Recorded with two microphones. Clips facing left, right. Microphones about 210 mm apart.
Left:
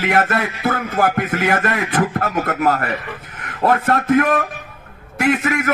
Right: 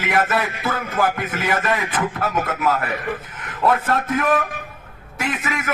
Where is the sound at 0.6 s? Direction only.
50° left (ahead or behind).